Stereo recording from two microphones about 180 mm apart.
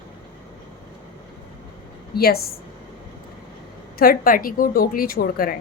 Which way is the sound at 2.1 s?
60° left (ahead or behind).